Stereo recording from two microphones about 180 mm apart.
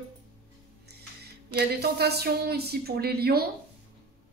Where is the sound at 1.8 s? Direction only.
65° right (ahead or behind).